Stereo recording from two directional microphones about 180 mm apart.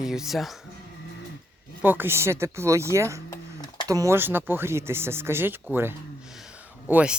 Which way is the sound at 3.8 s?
20° right (ahead or behind).